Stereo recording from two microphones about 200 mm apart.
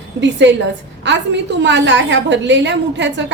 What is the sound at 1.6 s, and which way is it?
A woman's voice, 65° right (ahead or behind).